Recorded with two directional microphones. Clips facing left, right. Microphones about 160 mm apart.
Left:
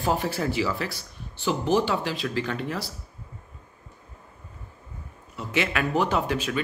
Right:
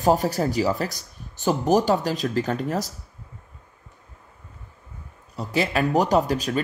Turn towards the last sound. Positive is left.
turn(degrees=-40)  # may be behind; listen again after turning